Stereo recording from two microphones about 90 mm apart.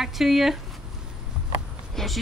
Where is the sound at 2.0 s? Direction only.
5° left (ahead or behind).